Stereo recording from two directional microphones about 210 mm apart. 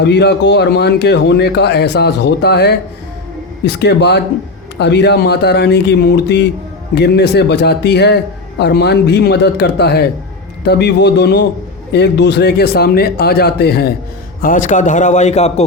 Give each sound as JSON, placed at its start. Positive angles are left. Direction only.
{"t": 0.0, "sound": "speech", "side_deg": 55}
{"t": 14.4, "sound": "a man's voice", "side_deg": 40}